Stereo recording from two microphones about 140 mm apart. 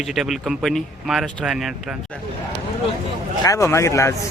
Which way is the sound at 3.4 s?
25° left (ahead or behind).